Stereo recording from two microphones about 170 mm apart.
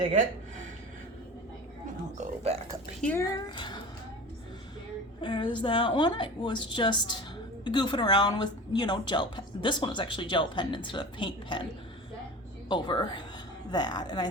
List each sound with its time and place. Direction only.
2.1 s speech: 40° right (ahead or behind)
3.0 s speech: 10° left (ahead or behind)
3.5 s music: 30° left (ahead or behind)
5.2 s speech: 30° left (ahead or behind)
12.6 s speech: 25° left (ahead or behind)